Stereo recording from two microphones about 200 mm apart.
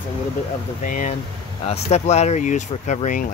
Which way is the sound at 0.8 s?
40° left (ahead or behind).